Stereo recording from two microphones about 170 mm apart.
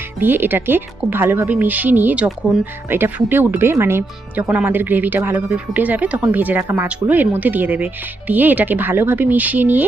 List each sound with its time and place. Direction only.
0.2 s speech: 10° right (ahead or behind)